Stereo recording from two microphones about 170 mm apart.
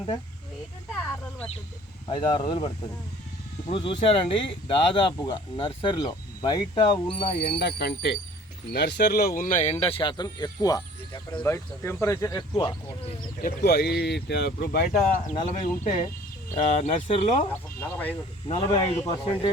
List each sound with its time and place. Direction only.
0.9 s a sound: 5° left (ahead or behind)
2.0 s speech: 30° left (ahead or behind)
7.3 s speech: 75° left (ahead or behind); by 11.5 s 25° left (ahead or behind)
11.5 s speech: 15° left (ahead or behind)
13.4 s speech: 65° left (ahead or behind)
15.4 s speech: 45° left (ahead or behind)
17.5 s speech: 10° left (ahead or behind)
18.4 s speech: 30° left (ahead or behind)